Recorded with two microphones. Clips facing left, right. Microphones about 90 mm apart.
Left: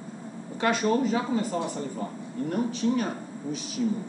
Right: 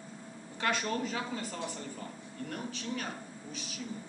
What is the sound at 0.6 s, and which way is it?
Speech, 10° left (ahead or behind).